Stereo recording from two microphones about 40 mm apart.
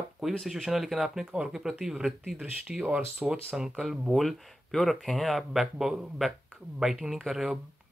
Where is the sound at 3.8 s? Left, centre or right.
Centre.